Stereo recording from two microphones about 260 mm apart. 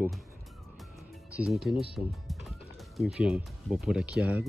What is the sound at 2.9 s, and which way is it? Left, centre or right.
Speech, centre.